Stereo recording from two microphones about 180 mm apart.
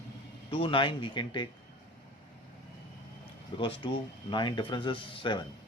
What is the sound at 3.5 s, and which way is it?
Speech, 30° left (ahead or behind).